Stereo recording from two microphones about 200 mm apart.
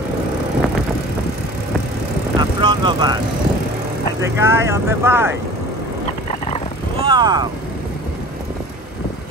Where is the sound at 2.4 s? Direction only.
20° right (ahead or behind).